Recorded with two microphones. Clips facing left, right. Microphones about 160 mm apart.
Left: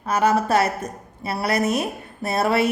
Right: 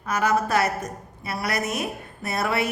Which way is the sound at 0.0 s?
30° left (ahead or behind).